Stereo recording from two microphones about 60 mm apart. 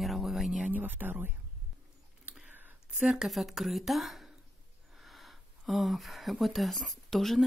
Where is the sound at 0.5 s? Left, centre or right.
Right.